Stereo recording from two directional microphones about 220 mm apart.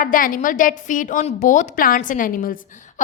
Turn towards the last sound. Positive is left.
turn(degrees=40)  # may be behind; listen again after turning